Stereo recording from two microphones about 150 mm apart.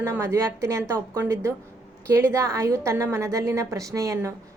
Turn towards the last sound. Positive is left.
turn(degrees=-20)  # may be behind; listen again after turning